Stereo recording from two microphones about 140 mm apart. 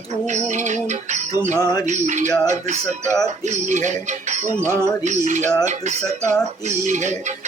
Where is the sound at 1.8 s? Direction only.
55° right (ahead or behind).